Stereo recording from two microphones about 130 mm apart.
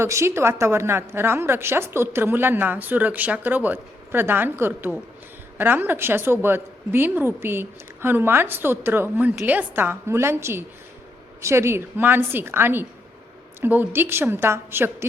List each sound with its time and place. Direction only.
0.0 s a woman's voice: 20° right (ahead or behind)